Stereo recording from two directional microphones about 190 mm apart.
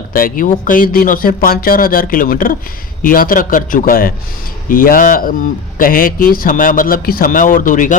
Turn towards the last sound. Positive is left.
turn(degrees=45)  # may be behind; listen again after turning